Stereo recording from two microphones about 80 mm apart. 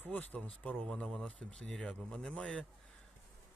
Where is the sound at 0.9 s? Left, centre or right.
Centre.